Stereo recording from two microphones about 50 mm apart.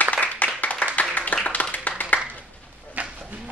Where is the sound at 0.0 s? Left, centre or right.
Left.